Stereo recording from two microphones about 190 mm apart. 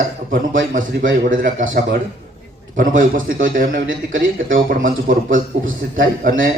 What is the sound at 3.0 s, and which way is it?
A man's voice, 45° right (ahead or behind).